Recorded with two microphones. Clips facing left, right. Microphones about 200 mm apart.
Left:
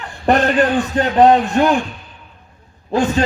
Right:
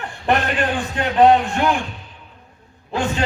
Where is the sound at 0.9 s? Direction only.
40° left (ahead or behind).